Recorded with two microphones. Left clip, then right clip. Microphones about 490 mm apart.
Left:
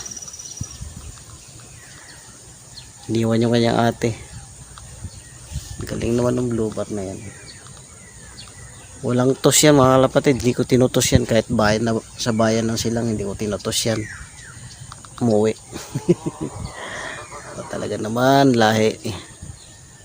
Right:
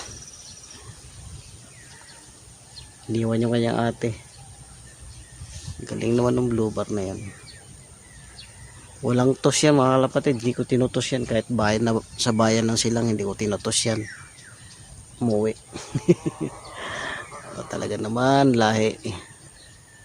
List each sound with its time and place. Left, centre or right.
3.1 s speech: right
5.8 s speech: right
9.0 s speech: right
15.2 s a sound: right
16.7 s speech: right